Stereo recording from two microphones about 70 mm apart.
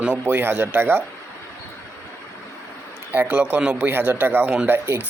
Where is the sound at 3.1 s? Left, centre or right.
Right.